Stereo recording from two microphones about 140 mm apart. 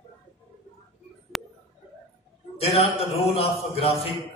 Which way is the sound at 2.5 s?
45° left (ahead or behind).